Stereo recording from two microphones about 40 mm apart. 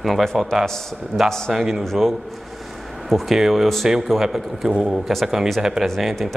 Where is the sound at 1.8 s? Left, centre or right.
Centre.